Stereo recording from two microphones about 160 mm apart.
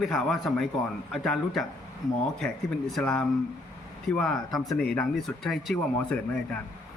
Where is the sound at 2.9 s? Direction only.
5° left (ahead or behind).